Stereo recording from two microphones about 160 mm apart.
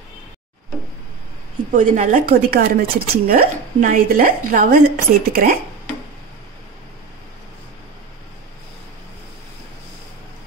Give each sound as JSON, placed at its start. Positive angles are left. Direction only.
{"t": 1.8, "sound": "speech", "side_deg": -55}